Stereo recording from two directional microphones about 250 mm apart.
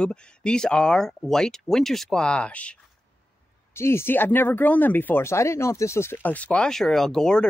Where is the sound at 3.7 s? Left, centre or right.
Centre.